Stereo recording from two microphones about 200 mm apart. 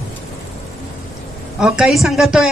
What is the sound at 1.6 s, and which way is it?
Speech, centre (ahead or behind).